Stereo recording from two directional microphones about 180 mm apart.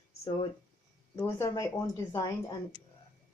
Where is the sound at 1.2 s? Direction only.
15° left (ahead or behind).